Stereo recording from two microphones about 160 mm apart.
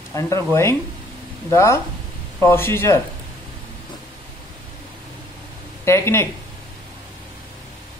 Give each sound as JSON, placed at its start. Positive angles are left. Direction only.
{"t": 0.1, "sound": "speech", "side_deg": 20}
{"t": 5.9, "sound": "speech", "side_deg": 15}